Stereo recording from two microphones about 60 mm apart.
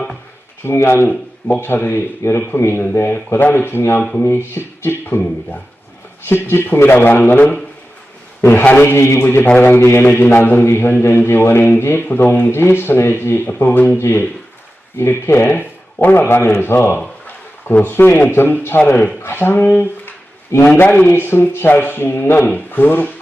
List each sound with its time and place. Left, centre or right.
0.6 s speech: left
6.2 s a man's voice: left
20.8 s a man's voice: left
21.1 s speech: left